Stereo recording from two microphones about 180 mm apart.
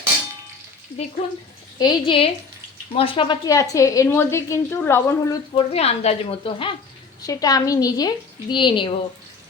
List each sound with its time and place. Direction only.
1.8 s a woman's voice: 25° left (ahead or behind)
5.5 s a woman's voice: 35° left (ahead or behind)